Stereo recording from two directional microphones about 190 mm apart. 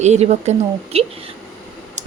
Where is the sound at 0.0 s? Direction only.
35° right (ahead or behind).